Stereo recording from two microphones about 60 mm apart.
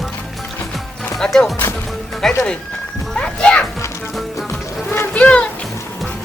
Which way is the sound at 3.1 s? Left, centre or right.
Centre.